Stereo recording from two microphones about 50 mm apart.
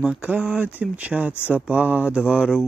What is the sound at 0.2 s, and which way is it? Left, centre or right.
Speech, right.